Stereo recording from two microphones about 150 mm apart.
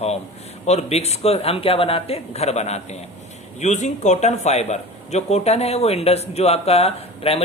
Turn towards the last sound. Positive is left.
turn(degrees=40)  # may be behind; listen again after turning